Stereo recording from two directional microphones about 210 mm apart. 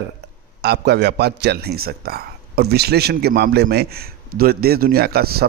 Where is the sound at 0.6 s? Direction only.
50° right (ahead or behind).